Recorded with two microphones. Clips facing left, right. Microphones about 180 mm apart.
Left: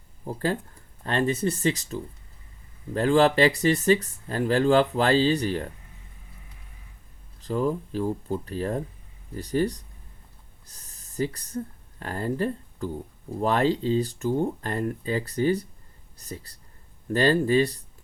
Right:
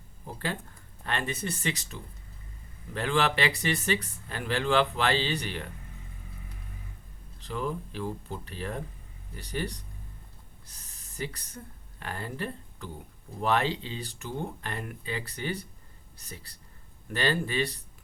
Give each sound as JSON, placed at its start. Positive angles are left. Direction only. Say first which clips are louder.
{"t": 1.0, "sound": "speech", "louder": "left 8 dB", "side_deg": 40}
{"t": 2.9, "sound": "speech", "louder": "left 8 dB", "side_deg": 40}
{"t": 7.4, "sound": "speech", "louder": "left 7 dB", "side_deg": 35}
{"t": 10.8, "sound": "speech", "louder": "left 9 dB", "side_deg": 45}